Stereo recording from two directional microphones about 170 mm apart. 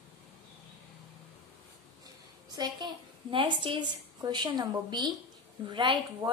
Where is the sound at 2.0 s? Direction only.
25° right (ahead or behind).